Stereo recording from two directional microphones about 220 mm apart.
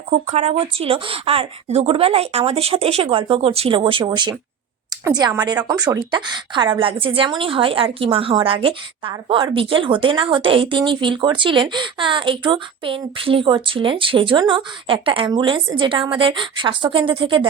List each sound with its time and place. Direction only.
0.1 s a woman's voice: 30° right (ahead or behind)